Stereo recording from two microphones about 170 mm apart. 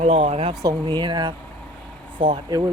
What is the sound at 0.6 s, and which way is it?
Speech, 25° right (ahead or behind).